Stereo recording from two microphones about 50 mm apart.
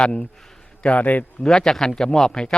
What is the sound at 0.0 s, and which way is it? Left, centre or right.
A man's voice, centre.